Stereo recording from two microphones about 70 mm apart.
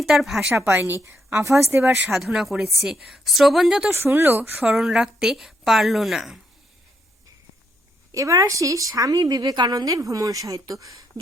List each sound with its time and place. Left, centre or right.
0.0 s a woman's voice: centre
0.7 s speech: right
2.0 s a woman's voice: centre
3.9 s speech: right
4.5 s a woman's voice: centre
8.1 s a woman's voice: right